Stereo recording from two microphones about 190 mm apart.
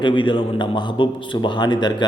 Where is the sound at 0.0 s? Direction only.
25° left (ahead or behind).